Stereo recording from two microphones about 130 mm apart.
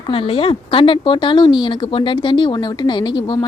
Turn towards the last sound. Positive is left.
turn(degrees=30)  # may be behind; listen again after turning